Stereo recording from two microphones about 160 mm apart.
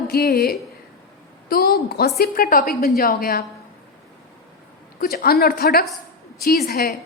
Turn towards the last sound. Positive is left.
turn(degrees=75)  # may be behind; listen again after turning